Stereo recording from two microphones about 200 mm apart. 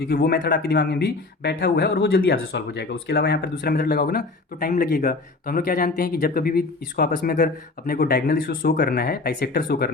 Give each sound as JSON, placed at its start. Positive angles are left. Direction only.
{"t": 0.0, "sound": "speech", "side_deg": 50}